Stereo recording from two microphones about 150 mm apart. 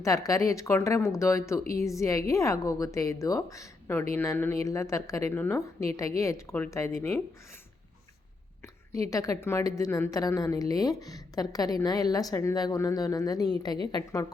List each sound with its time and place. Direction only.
0.0 s a woman's voice: 20° left (ahead or behind)
9.0 s a woman's voice: 20° left (ahead or behind)